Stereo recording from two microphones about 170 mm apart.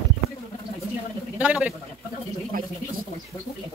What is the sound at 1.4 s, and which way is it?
Speech, 10° right (ahead or behind).